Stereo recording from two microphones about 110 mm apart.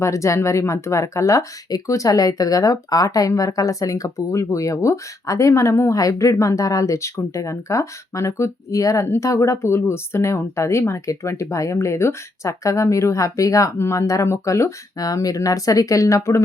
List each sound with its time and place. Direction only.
0.0 s speech: 30° left (ahead or behind)